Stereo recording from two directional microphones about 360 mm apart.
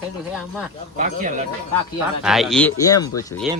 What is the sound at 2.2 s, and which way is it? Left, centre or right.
Speech, centre.